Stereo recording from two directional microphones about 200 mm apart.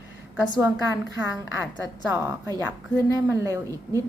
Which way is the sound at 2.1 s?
15° right (ahead or behind).